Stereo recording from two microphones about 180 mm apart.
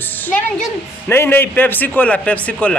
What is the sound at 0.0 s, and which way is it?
A woman's voice, 10° left (ahead or behind).